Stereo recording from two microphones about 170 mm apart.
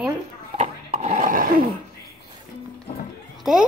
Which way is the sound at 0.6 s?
40° right (ahead or behind).